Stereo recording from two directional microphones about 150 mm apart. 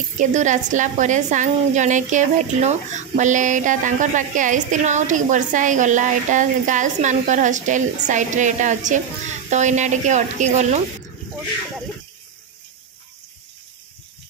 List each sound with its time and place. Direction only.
0.2 s a woman's voice: 55° right (ahead or behind)